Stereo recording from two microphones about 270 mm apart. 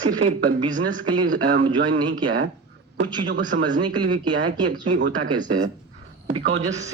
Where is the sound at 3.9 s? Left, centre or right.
Right.